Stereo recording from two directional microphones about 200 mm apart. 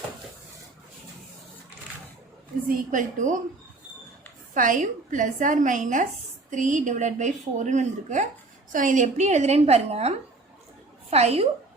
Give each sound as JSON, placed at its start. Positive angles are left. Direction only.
{"t": 2.6, "sound": "a woman's voice", "side_deg": -40}
{"t": 4.5, "sound": "a woman's voice", "side_deg": -40}